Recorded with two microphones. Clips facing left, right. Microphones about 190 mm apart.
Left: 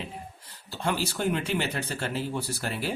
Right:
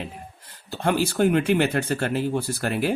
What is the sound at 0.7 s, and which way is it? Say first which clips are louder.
Speech: right 6 dB; 55° right (ahead or behind).